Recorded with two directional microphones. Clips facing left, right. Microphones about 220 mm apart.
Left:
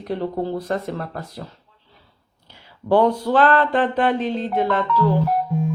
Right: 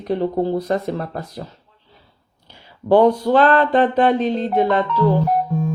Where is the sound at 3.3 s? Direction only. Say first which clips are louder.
Right 3 dB; 20° right (ahead or behind).